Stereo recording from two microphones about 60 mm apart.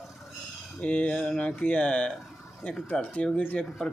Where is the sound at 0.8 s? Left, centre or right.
Left.